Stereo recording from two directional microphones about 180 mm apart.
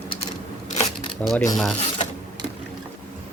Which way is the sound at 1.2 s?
10° left (ahead or behind).